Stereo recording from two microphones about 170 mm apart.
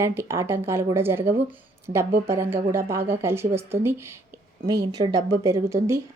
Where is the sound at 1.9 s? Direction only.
25° right (ahead or behind).